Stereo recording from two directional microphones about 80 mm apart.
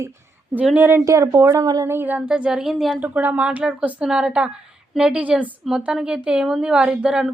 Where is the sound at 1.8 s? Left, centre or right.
Right.